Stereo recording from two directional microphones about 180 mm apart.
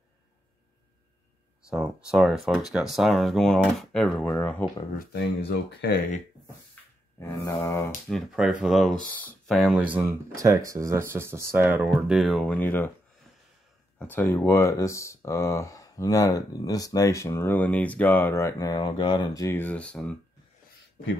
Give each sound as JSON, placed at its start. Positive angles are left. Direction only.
{"t": 1.7, "sound": "speech", "side_deg": -5}
{"t": 4.9, "sound": "speech", "side_deg": 65}
{"t": 6.7, "sound": "a sound", "side_deg": 15}
{"t": 8.1, "sound": "speech", "side_deg": -5}
{"t": 13.9, "sound": "speech", "side_deg": 10}